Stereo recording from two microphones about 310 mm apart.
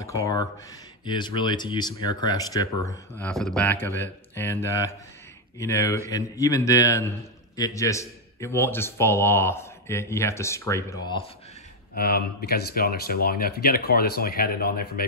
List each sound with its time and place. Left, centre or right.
0.0 s speech: centre
11.9 s speech: left